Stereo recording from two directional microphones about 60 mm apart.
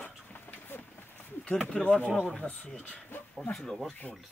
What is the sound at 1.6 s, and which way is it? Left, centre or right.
Speech, centre.